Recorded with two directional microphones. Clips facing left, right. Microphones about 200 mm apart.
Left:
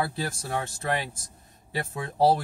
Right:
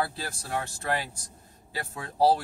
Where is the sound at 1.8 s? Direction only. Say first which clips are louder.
Left 1 dB; 20° left (ahead or behind).